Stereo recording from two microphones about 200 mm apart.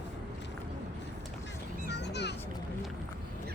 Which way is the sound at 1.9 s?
60° left (ahead or behind).